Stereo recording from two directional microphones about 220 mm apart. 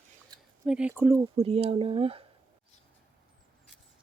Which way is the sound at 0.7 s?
5° right (ahead or behind).